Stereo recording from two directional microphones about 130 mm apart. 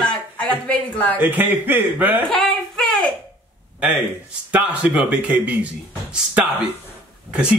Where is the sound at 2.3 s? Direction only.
5° left (ahead or behind).